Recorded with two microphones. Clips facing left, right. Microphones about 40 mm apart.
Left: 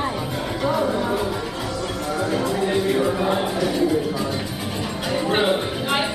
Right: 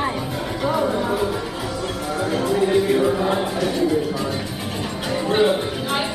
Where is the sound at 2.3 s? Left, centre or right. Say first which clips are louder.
Right 5 dB; centre.